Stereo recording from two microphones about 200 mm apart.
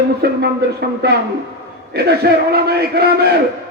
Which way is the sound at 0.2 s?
55° right (ahead or behind).